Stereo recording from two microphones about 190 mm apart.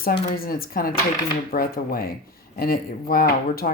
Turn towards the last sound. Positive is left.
turn(degrees=50)  # may be behind; listen again after turning